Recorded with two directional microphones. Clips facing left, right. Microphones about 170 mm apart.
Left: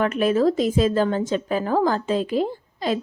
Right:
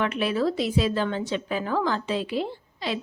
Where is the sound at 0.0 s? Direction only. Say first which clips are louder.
Left 5 dB; 45° left (ahead or behind).